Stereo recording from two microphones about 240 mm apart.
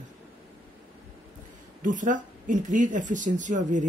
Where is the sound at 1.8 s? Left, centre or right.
Right.